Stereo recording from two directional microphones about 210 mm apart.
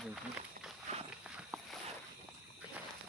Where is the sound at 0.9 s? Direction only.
35° right (ahead or behind).